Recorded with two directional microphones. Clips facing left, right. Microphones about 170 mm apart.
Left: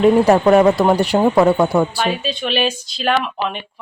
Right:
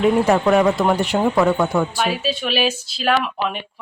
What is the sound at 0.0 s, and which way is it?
Speech, 35° left (ahead or behind).